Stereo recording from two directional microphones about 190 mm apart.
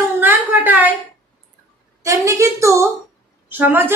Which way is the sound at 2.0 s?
15° right (ahead or behind).